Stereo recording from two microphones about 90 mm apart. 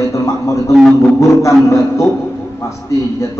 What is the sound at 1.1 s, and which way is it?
Speech, 35° left (ahead or behind).